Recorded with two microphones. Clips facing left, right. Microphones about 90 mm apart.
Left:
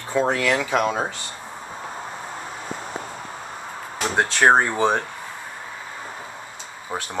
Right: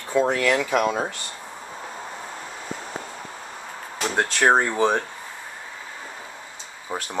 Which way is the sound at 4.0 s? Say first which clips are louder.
Left 2 dB; 20° left (ahead or behind).